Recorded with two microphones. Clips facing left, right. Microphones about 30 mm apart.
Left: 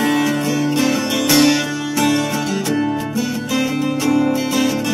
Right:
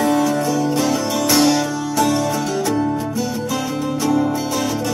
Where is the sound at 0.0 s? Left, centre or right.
Left.